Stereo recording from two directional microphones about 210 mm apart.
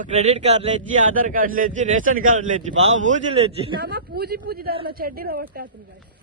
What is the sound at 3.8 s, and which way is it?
Speech, 50° right (ahead or behind).